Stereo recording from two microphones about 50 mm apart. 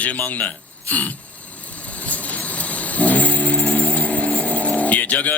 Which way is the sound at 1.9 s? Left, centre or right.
Left.